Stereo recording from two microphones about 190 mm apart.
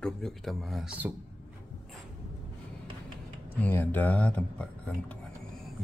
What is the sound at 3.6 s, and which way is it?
Speech, 10° left (ahead or behind).